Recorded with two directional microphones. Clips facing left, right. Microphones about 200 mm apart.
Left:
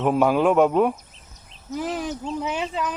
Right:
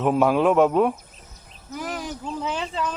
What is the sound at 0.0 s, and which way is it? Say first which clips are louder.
Speech: even; centre (ahead or behind).